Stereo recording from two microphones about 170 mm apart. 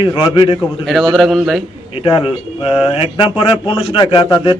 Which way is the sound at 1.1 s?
Centre (ahead or behind).